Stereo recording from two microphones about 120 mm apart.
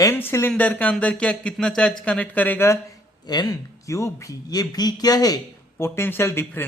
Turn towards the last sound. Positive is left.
turn(degrees=20)  # may be behind; listen again after turning